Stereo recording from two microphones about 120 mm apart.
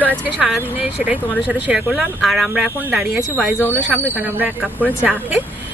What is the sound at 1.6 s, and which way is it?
Speech, 5° right (ahead or behind).